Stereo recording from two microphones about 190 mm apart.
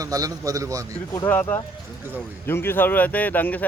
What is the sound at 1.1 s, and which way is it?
Speech, 10° left (ahead or behind).